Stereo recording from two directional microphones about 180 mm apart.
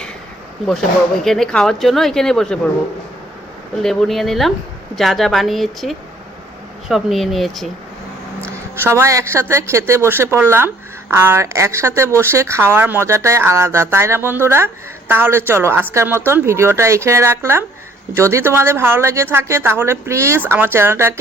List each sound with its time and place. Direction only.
1.2 s speech: centre (ahead or behind)
3.8 s speech: centre (ahead or behind)
8.8 s speech: 15° right (ahead or behind)